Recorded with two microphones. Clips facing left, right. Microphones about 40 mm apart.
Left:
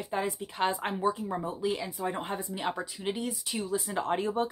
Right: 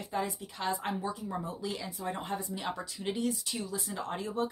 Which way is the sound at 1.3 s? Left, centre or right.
Left.